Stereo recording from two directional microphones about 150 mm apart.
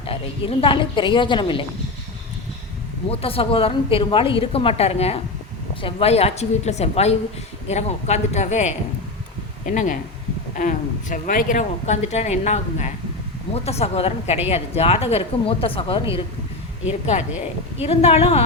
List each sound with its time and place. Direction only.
0.0 s a woman's voice: 35° left (ahead or behind)
3.1 s a woman's voice: 40° left (ahead or behind)
9.6 s a woman's voice: 60° left (ahead or behind); by 16.0 s 40° left (ahead or behind)
17.8 s speech: 45° left (ahead or behind)